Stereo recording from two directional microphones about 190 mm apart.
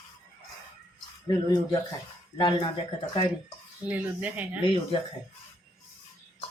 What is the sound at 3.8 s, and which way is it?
Speech, 10° right (ahead or behind).